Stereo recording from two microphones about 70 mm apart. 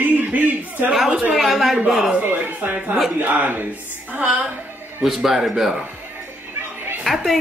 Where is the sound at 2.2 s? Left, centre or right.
Right.